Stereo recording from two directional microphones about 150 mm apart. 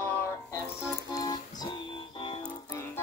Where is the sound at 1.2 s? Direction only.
25° left (ahead or behind).